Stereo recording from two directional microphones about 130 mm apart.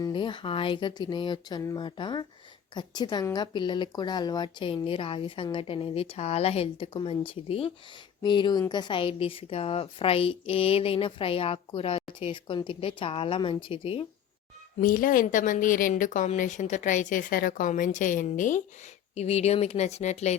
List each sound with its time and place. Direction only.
0.0 s a woman's voice: 40° left (ahead or behind)
8.2 s a woman's voice: 35° left (ahead or behind)
14.8 s a woman's voice: 90° left; by 18.6 s 75° left (ahead or behind)
19.1 s speech: 55° left (ahead or behind)